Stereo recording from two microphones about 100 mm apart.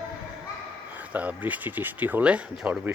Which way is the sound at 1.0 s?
15° right (ahead or behind).